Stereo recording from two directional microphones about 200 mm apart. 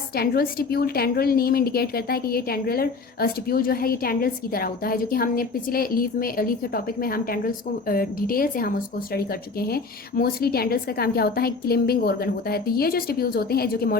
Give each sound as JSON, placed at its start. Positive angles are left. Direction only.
{"t": 0.2, "sound": "a woman's voice", "side_deg": 50}